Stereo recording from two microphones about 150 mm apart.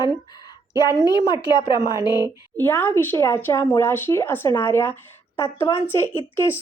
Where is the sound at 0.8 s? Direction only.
25° left (ahead or behind).